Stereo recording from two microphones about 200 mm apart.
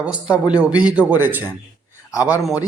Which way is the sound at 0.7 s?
5° right (ahead or behind).